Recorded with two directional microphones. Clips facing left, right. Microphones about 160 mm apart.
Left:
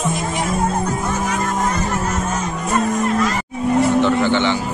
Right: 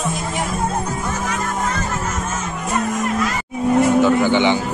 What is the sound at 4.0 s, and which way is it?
Speech, 10° right (ahead or behind).